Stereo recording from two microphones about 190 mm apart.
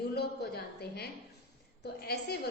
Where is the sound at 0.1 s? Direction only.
55° left (ahead or behind).